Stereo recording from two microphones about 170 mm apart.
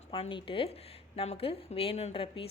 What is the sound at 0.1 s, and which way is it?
A woman's voice, 30° left (ahead or behind).